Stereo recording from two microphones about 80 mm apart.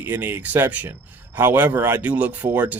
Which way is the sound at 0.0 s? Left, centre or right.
Right.